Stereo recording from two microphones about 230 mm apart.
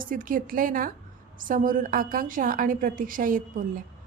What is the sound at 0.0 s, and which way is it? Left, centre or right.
A woman's voice, right.